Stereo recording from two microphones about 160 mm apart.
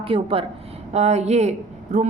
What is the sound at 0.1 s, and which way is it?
A woman's voice, 35° right (ahead or behind).